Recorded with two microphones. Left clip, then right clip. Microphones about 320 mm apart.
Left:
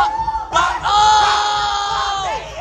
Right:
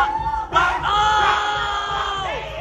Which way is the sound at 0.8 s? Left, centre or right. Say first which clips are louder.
Left 5 dB; centre.